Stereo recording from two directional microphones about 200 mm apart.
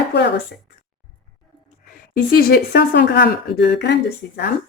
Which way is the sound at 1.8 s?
45° left (ahead or behind).